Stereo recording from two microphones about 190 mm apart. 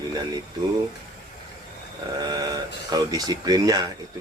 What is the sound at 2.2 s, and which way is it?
Speech, 20° right (ahead or behind).